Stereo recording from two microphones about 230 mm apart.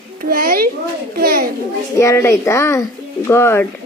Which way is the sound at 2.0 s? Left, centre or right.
Centre.